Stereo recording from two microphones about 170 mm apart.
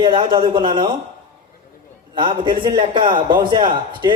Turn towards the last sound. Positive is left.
turn(degrees=-25)  # may be behind; listen again after turning